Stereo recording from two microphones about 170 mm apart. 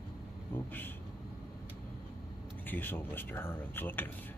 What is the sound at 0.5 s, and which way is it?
Speech, 10° left (ahead or behind).